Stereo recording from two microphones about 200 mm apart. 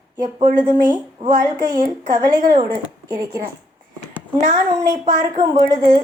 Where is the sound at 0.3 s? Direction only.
20° right (ahead or behind).